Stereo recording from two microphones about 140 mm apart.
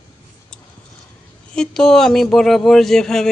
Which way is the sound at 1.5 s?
5° left (ahead or behind).